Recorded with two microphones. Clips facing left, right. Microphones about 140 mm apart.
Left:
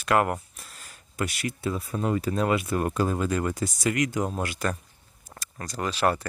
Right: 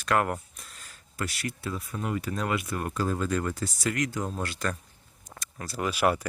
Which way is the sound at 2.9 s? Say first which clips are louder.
Left 3 dB; 15° left (ahead or behind).